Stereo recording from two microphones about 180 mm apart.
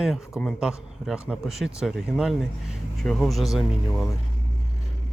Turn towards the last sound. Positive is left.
turn(degrees=0)  # may be behind; listen again after turning